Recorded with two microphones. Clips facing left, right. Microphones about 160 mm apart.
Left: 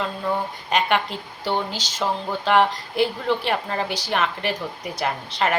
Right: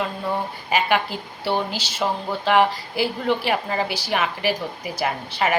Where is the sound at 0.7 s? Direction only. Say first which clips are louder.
Even; 5° right (ahead or behind).